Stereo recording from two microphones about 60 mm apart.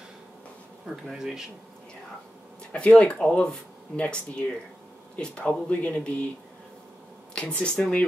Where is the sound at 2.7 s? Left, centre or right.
Centre.